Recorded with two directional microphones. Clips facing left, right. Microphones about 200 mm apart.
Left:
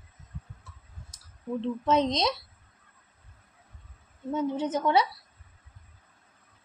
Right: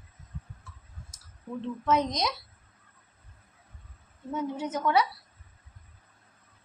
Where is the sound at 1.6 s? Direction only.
25° left (ahead or behind).